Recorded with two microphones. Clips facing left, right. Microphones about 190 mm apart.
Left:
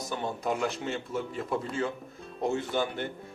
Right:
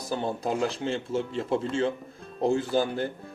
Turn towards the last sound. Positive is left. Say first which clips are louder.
# right 4 dB
turn(degrees=-35)  # may be behind; listen again after turning